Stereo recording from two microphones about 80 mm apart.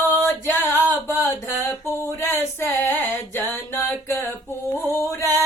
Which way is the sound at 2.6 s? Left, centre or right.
Left.